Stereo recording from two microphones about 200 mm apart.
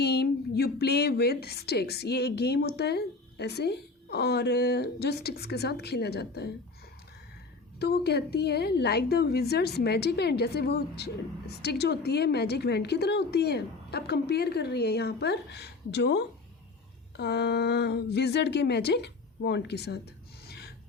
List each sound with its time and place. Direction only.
0.0 s a woman's voice: 55° left (ahead or behind)
7.8 s a woman's voice: 55° left (ahead or behind)
20.5 s filing: 55° left (ahead or behind)